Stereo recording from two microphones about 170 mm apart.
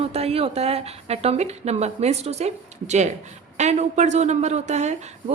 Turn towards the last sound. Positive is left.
turn(degrees=-40)  # may be behind; listen again after turning